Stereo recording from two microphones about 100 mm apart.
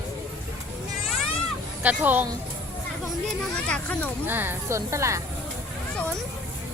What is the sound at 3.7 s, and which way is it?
Speech, 15° left (ahead or behind).